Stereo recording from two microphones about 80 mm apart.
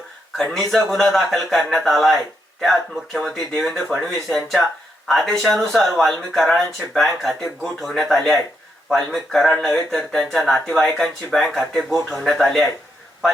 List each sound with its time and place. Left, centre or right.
0.5 s speech: centre